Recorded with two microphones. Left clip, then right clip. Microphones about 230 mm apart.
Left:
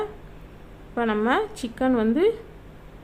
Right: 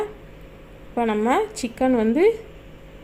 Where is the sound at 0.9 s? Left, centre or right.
Centre.